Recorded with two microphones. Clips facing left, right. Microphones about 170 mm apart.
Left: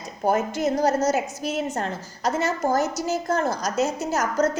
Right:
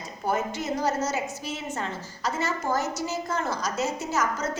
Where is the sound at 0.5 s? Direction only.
40° left (ahead or behind).